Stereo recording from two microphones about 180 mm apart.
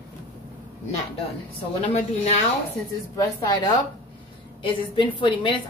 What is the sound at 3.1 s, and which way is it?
A woman's voice, 20° left (ahead or behind).